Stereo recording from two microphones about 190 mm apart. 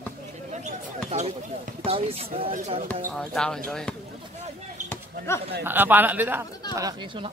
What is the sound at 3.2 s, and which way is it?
Speech, 5° left (ahead or behind).